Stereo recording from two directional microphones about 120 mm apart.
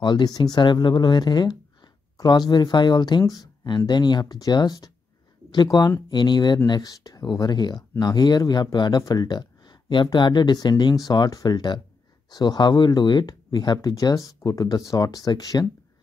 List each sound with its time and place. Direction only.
0.0 s speech: 35° left (ahead or behind)